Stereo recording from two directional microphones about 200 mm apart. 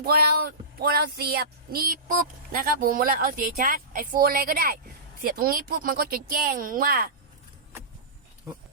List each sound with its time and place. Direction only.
0.0 s speech: 50° right (ahead or behind)